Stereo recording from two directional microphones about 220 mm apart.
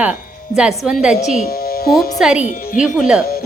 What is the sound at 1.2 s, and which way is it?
Speech, 30° left (ahead or behind).